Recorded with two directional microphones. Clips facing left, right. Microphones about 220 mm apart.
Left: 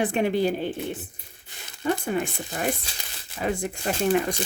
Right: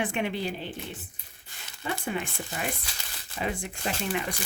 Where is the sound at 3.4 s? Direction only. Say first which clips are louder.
Left 5 dB; 50° left (ahead or behind).